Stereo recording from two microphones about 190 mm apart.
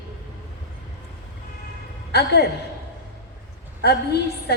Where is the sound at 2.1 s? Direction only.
60° left (ahead or behind).